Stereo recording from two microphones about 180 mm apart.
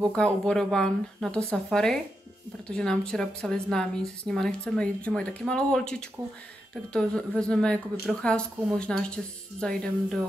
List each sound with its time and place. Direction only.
0.1 s a woman's voice: 5° left (ahead or behind)